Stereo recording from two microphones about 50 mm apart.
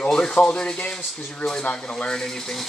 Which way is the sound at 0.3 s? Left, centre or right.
Left.